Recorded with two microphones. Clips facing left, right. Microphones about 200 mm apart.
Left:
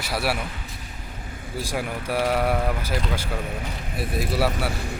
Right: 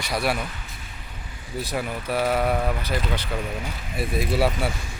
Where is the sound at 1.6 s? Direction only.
10° left (ahead or behind).